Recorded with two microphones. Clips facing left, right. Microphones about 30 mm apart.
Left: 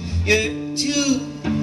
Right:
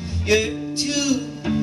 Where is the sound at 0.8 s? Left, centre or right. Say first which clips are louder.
Left 2 dB; left.